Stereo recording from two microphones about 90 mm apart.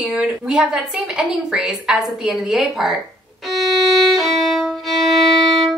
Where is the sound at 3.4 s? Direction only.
Centre (ahead or behind).